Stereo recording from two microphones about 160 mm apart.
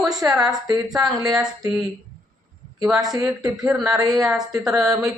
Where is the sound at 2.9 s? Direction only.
25° right (ahead or behind).